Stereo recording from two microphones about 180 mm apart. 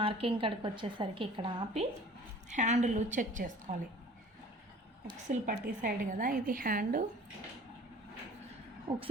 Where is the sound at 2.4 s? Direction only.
40° right (ahead or behind).